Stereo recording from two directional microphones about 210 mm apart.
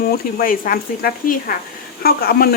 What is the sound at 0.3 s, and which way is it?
Speech, 45° left (ahead or behind).